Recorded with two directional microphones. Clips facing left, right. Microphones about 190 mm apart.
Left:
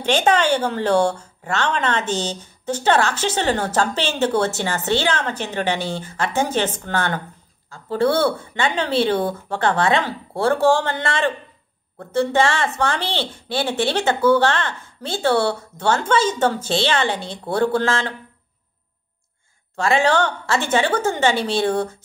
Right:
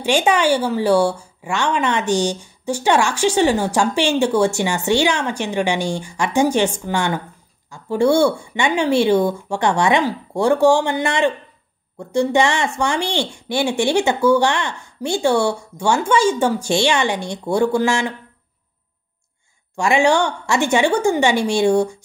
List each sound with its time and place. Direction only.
0.0 s a woman's voice: 10° right (ahead or behind)
19.8 s a woman's voice: 15° right (ahead or behind)